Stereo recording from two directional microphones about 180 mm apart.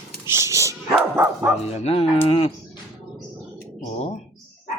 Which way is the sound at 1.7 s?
35° left (ahead or behind).